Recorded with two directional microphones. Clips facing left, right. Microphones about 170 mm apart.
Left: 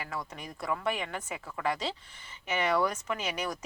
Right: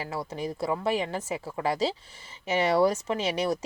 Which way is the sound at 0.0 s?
30° right (ahead or behind).